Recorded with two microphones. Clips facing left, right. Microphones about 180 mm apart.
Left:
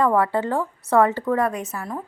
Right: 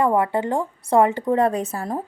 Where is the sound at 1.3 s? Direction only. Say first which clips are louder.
Right 3 dB; 30° right (ahead or behind).